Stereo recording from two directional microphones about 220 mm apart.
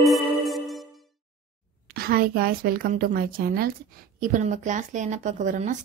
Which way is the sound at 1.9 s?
45° right (ahead or behind).